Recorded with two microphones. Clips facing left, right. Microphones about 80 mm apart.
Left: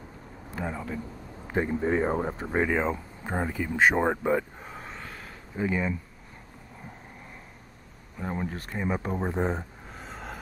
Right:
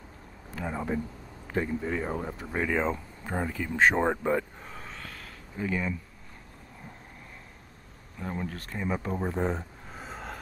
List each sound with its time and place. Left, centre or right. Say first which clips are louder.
0.7 s speech: right 4 dB; right
1.5 s speech: left 4 dB; left
2.7 s speech: left 1 dB; centre
8.2 s speech: left 2 dB; left
9.8 s a sound: even; centre